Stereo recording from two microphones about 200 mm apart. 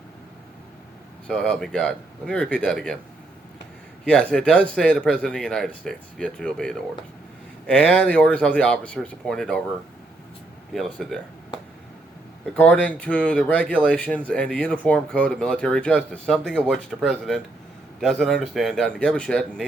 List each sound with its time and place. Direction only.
1.3 s speech: centre (ahead or behind)
4.0 s speech: 5° left (ahead or behind)
10.7 s speech: centre (ahead or behind)
12.5 s speech: 5° left (ahead or behind)